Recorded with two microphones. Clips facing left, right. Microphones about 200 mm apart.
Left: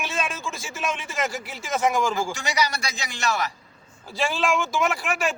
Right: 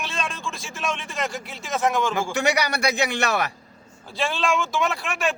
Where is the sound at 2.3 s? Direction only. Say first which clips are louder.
Right 4 dB; 60° right (ahead or behind).